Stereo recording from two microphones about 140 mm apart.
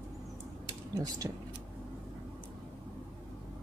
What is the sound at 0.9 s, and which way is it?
Speech, 25° right (ahead or behind).